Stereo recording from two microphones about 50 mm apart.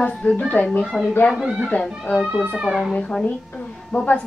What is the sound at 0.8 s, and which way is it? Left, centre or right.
Speech, left.